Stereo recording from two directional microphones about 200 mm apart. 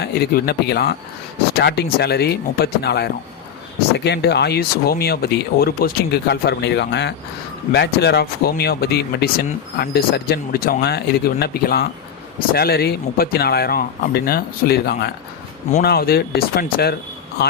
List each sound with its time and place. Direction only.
0.0 s speech: 50° left (ahead or behind)